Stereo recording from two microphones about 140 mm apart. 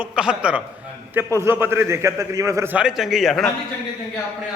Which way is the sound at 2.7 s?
5° right (ahead or behind).